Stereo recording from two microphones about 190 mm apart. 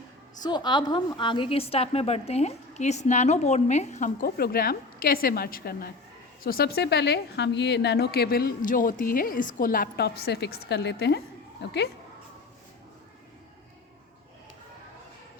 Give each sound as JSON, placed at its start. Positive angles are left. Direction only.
{"t": 0.4, "sound": "a woman's voice", "side_deg": 25}